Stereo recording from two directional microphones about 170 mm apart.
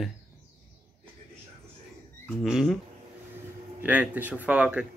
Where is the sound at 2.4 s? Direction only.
Centre (ahead or behind).